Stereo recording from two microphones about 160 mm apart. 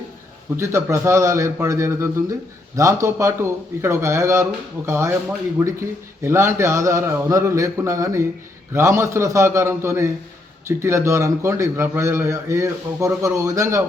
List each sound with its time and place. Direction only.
0.5 s a man's voice: 15° right (ahead or behind)